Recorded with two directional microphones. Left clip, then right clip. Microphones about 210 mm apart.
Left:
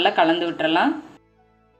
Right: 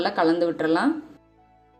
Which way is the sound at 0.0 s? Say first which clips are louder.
Left 3 dB; 15° right (ahead or behind).